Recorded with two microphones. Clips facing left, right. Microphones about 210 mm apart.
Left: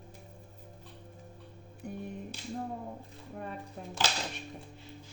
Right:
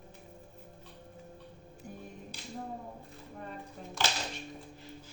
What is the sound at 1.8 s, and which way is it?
Speech, 60° left (ahead or behind).